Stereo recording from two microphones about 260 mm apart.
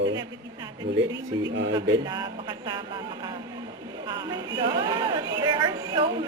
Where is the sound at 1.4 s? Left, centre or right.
Right.